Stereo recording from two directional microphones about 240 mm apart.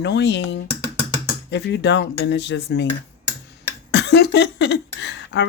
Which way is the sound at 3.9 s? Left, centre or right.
Left.